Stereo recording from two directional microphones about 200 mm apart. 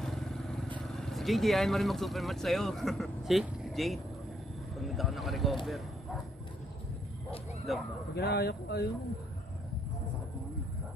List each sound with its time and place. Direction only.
0.0 s vehicle: centre (ahead or behind)
0.8 s speech: centre (ahead or behind)
7.7 s a man's voice: centre (ahead or behind)
8.1 s a man's voice: 55° left (ahead or behind)